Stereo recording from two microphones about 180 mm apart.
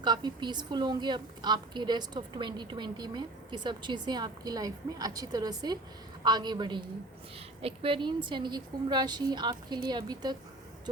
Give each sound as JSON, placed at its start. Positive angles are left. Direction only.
{"t": 0.0, "sound": "a woman's voice", "side_deg": -25}